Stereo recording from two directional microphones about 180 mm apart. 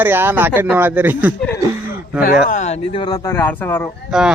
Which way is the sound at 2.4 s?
40° left (ahead or behind).